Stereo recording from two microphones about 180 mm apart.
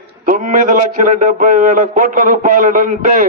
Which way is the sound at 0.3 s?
45° right (ahead or behind).